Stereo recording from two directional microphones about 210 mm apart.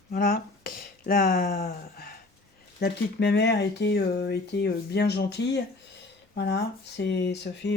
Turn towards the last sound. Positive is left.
turn(degrees=55)  # may be behind; listen again after turning